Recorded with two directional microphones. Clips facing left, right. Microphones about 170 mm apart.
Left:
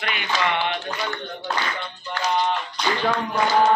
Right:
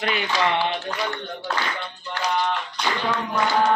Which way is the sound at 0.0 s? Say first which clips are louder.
Right 2 dB; 35° right (ahead or behind).